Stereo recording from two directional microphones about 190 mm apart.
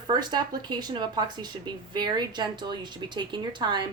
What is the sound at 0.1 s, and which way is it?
Speech, 20° right (ahead or behind).